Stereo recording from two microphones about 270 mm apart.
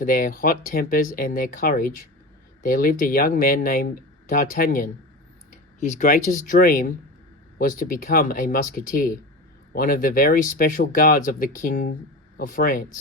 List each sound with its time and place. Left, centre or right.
0.0 s speech: left